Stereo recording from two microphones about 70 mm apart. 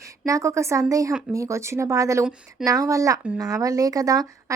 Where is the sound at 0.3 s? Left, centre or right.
Right.